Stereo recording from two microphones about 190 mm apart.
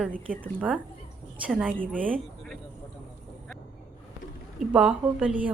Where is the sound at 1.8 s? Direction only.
45° right (ahead or behind).